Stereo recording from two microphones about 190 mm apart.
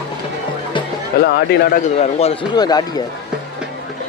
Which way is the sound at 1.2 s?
60° left (ahead or behind).